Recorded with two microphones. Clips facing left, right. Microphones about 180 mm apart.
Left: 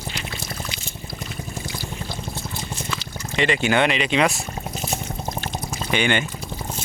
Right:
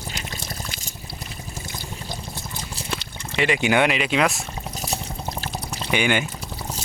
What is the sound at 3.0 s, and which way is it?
Speech, 5° right (ahead or behind).